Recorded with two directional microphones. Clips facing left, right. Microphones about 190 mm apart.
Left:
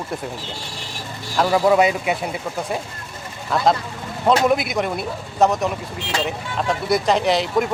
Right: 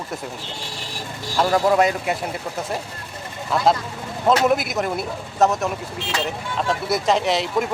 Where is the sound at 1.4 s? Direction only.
5° left (ahead or behind).